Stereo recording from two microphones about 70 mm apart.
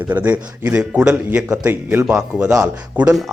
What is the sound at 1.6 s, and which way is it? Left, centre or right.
Speech, right.